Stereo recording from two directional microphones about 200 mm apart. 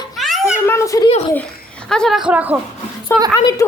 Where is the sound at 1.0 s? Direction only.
30° left (ahead or behind).